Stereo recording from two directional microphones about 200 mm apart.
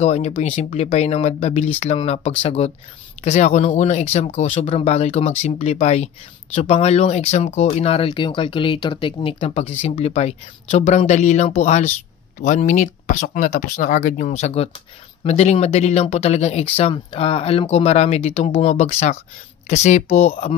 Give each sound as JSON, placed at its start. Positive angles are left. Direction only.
{"t": 0.0, "sound": "speech", "side_deg": 35}